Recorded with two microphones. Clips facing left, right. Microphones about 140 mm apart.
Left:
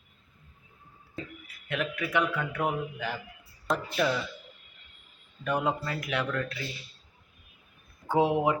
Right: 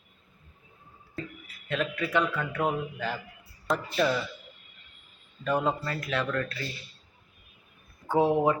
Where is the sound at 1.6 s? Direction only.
10° left (ahead or behind).